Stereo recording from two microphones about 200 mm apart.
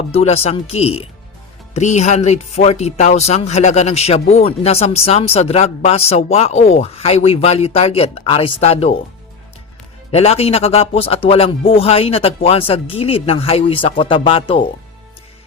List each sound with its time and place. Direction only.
0.1 s speech: 30° left (ahead or behind)
10.1 s a man's voice: 30° left (ahead or behind)